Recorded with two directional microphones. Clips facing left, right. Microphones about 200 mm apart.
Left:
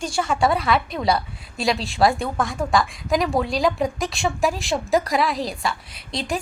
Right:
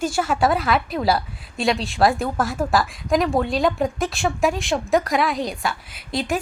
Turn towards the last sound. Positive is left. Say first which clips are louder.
# right 3 dB
turn(degrees=0)  # may be behind; listen again after turning